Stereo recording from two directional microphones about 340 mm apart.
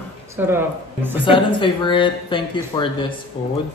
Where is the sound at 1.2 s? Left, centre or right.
Centre.